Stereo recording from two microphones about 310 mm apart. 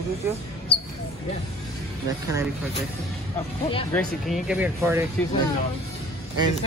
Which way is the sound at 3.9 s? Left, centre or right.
Centre.